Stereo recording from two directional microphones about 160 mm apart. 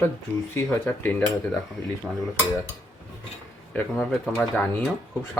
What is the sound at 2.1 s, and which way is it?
Speech, 5° right (ahead or behind).